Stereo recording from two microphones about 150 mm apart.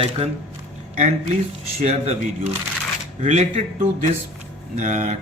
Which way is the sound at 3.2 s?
50° right (ahead or behind).